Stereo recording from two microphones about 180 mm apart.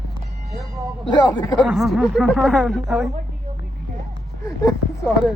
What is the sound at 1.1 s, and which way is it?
Speech, 25° left (ahead or behind).